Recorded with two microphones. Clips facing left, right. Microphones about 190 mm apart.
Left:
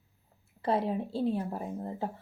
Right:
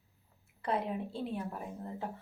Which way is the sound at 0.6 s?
30° left (ahead or behind).